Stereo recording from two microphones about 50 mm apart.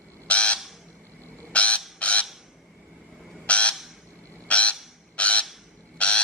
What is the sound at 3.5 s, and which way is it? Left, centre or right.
Crow, left.